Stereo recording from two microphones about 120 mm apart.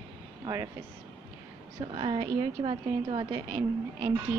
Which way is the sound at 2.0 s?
50° right (ahead or behind).